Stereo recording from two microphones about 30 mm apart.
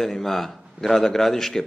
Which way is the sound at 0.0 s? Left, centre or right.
Centre.